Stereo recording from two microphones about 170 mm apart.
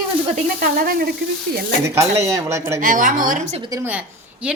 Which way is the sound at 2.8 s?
50° right (ahead or behind).